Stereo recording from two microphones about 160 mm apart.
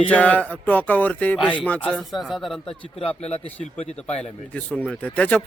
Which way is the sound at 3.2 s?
40° left (ahead or behind).